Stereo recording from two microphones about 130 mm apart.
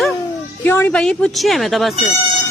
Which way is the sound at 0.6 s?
15° left (ahead or behind).